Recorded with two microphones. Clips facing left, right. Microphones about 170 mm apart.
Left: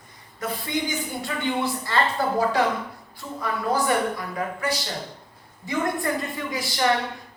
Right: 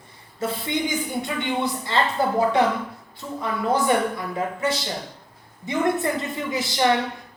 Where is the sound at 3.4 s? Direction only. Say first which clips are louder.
Right 2 dB; 20° right (ahead or behind).